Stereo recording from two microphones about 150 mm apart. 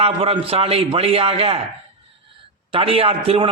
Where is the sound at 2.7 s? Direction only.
40° right (ahead or behind).